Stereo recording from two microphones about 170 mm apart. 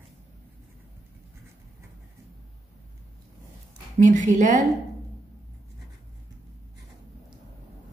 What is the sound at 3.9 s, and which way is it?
Speech, 45° right (ahead or behind).